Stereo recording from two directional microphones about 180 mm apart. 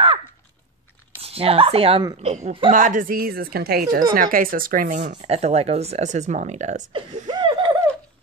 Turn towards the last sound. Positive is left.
turn(degrees=-25)  # may be behind; listen again after turning